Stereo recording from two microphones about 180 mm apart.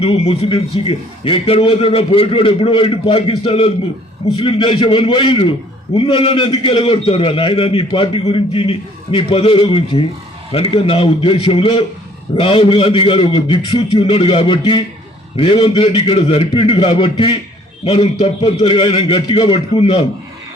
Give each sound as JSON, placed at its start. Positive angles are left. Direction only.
{"t": 0.0, "sound": "a man's voice", "side_deg": 35}